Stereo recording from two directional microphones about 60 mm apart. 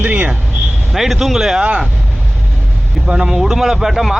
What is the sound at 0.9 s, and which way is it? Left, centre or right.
Speech, centre.